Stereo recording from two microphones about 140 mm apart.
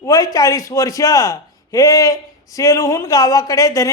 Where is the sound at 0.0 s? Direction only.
25° left (ahead or behind).